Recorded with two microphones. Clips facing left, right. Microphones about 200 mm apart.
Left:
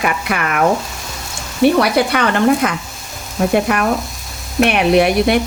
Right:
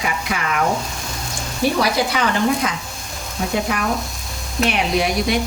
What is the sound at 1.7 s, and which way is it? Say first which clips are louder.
Speech: left 5 dB; 60° left (ahead or behind).